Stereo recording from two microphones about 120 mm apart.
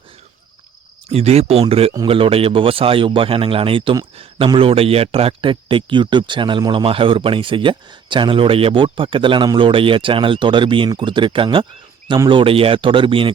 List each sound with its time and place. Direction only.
1.1 s a man's voice: 60° right (ahead or behind)